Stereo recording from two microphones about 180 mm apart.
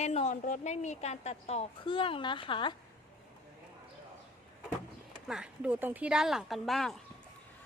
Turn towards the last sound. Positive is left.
turn(degrees=0)  # may be behind; listen again after turning